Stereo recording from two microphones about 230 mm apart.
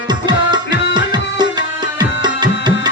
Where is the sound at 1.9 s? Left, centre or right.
Centre.